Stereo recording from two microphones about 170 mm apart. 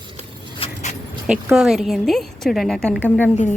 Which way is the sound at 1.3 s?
5° right (ahead or behind).